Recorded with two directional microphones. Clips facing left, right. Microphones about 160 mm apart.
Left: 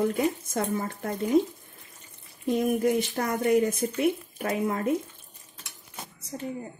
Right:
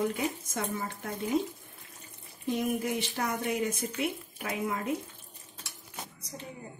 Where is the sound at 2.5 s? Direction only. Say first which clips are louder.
Left 7 dB; 50° left (ahead or behind).